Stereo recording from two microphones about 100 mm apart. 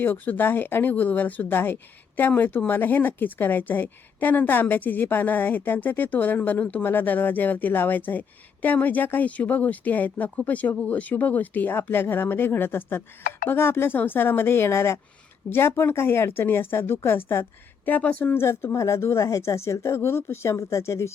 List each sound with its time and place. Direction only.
0.0 s speech: 20° left (ahead or behind)